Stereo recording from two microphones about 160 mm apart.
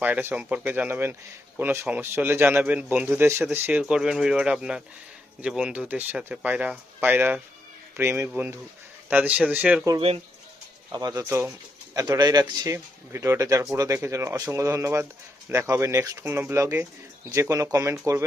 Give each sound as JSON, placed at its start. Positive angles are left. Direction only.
{"t": 0.0, "sound": "speech", "side_deg": -10}
{"t": 10.9, "sound": "speech", "side_deg": -25}